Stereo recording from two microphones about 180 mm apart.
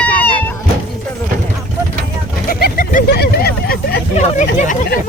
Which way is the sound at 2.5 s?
55° left (ahead or behind).